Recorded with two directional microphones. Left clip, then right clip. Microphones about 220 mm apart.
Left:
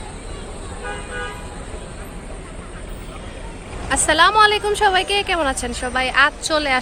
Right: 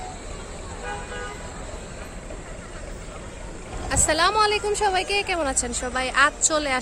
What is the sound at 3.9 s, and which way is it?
A woman's voice, centre (ahead or behind).